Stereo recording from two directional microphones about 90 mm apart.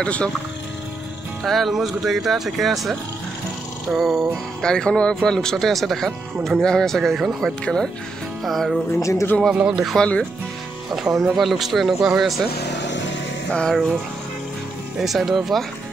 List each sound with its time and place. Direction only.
0.0 s speech: 10° left (ahead or behind)
1.4 s speech: centre (ahead or behind)
4.6 s speech: 10° left (ahead or behind)
7.6 s speech: 10° left (ahead or behind)
9.0 s speech: 35° left (ahead or behind)
9.5 s speech: 10° right (ahead or behind)
9.9 s speech: 10° left (ahead or behind)
11.3 s speech: centre (ahead or behind)
13.5 s speech: 10° left (ahead or behind)
15.0 s speech: centre (ahead or behind)